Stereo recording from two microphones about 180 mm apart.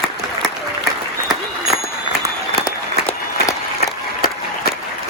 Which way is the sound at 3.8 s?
55° left (ahead or behind).